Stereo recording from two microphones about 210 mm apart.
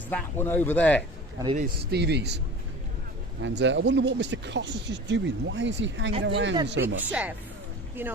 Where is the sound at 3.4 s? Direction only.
60° right (ahead or behind).